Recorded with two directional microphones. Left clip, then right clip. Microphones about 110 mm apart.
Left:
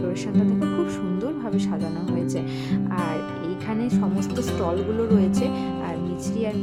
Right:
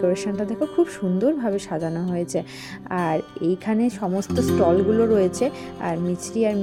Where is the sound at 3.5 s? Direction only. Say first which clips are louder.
Right 7 dB; 40° right (ahead or behind).